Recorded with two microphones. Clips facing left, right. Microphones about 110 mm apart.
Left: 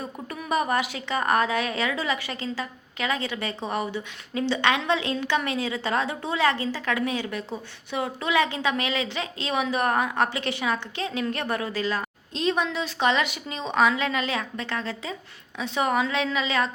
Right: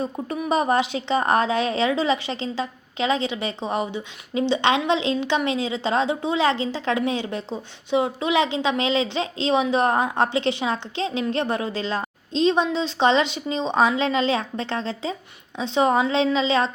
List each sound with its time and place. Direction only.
0.0 s a woman's voice: 25° right (ahead or behind)